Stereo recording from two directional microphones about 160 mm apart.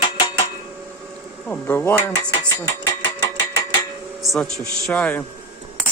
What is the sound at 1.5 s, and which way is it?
Speech, 15° left (ahead or behind).